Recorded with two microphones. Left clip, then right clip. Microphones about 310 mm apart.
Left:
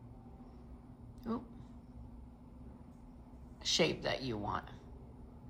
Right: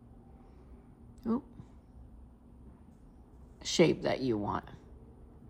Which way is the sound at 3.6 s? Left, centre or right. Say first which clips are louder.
Right 5 dB; right.